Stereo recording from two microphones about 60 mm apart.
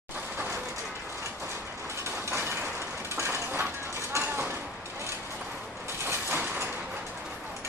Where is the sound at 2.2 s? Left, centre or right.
Right.